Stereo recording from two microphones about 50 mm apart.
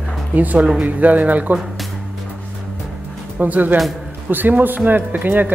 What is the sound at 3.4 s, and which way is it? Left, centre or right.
Speech, right.